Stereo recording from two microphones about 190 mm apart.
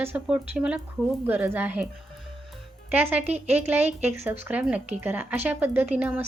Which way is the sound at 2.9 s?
10° right (ahead or behind).